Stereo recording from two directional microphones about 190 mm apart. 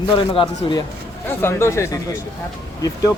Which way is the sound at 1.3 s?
15° left (ahead or behind).